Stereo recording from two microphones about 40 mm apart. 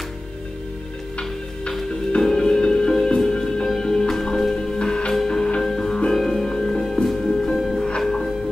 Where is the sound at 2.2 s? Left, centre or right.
Centre.